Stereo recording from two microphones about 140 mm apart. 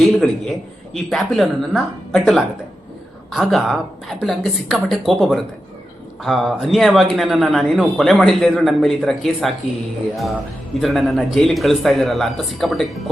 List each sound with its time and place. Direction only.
0.0 s a man's voice: centre (ahead or behind)
10.8 s a man's voice: centre (ahead or behind)